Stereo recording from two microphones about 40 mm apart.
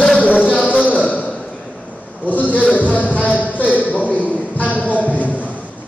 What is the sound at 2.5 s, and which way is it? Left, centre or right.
Music, left.